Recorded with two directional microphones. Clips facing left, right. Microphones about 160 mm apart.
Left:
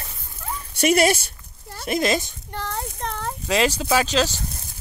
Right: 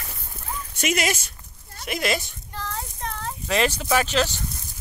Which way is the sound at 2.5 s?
65° left (ahead or behind).